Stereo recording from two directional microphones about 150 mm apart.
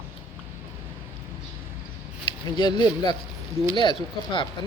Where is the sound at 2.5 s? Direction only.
30° left (ahead or behind).